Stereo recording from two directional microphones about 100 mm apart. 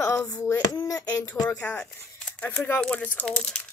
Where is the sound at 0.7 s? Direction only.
35° left (ahead or behind).